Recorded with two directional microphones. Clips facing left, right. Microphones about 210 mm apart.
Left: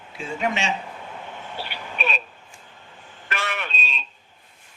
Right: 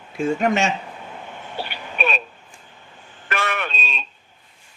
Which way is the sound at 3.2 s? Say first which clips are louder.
Right 5 dB; 55° right (ahead or behind).